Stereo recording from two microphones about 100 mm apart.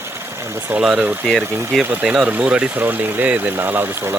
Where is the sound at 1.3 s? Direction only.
Centre (ahead or behind).